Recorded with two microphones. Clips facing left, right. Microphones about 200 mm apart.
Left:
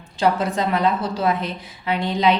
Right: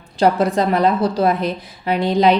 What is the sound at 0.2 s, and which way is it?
A woman's voice, 35° right (ahead or behind).